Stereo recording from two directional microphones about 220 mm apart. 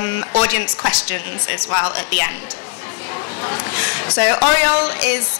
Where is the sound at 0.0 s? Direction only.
15° left (ahead or behind).